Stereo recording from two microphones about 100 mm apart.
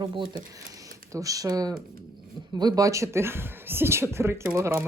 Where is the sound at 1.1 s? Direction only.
35° right (ahead or behind).